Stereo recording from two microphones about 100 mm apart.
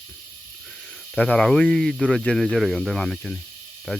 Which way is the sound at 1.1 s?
10° left (ahead or behind).